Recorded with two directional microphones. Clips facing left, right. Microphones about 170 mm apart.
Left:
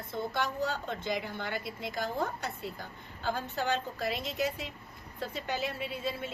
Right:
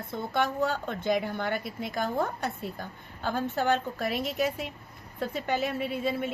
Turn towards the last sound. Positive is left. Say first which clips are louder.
# right 6 dB
turn(degrees=-55)  # may be behind; listen again after turning